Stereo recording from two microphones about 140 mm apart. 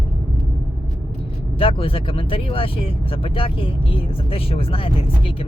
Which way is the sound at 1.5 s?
40° left (ahead or behind).